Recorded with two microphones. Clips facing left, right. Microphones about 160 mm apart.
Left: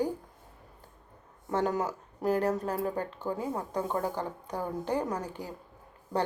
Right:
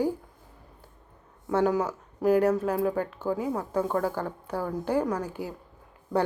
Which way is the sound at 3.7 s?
15° left (ahead or behind).